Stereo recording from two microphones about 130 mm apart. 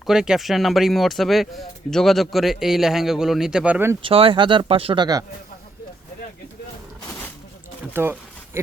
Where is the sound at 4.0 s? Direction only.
45° right (ahead or behind).